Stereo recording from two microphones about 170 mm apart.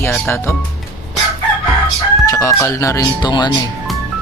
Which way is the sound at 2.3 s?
15° left (ahead or behind).